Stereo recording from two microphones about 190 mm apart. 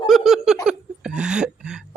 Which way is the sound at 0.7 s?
5° right (ahead or behind).